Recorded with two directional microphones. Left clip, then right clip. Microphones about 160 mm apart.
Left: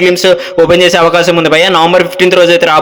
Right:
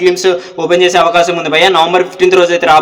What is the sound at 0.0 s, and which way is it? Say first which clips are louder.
A man's voice: left 3 dB; 30° left (ahead or behind).